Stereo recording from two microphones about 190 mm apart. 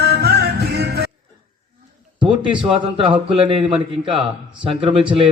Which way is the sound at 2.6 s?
30° right (ahead or behind).